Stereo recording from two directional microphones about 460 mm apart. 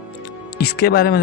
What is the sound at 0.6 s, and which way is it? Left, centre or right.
Speech, centre.